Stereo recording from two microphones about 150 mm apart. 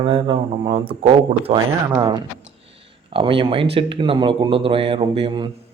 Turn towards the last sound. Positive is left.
turn(degrees=-35)  # may be behind; listen again after turning